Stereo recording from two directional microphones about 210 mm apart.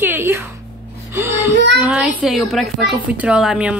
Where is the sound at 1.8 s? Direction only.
5° right (ahead or behind).